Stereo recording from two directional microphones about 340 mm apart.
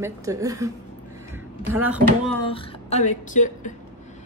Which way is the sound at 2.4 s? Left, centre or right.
Centre.